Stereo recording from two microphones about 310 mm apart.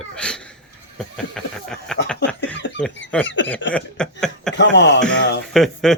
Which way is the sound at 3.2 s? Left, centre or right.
Left.